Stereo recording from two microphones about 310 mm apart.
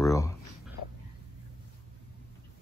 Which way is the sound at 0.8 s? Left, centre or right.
Left.